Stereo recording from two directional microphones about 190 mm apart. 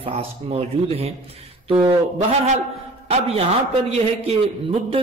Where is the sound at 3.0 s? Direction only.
30° right (ahead or behind).